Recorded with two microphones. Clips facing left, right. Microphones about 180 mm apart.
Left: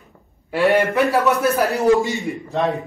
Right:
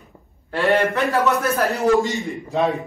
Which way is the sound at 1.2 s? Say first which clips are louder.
Left 2 dB; 15° left (ahead or behind).